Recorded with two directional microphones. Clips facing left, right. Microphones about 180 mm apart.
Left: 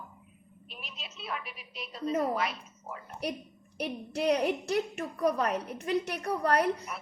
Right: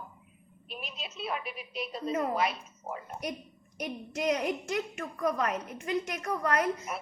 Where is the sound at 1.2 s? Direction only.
20° right (ahead or behind).